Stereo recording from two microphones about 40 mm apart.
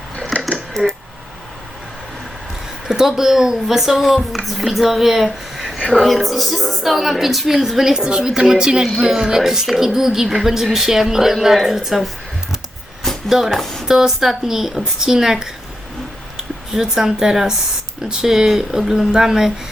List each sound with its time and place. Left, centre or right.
0.8 s speech: centre
2.8 s a woman's voice: centre
11.8 s a sound: centre
13.1 s music: centre
13.5 s speech: centre
13.8 s a woman's voice: centre